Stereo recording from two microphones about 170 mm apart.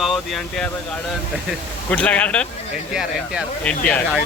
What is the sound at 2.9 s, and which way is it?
Speech, 5° right (ahead or behind).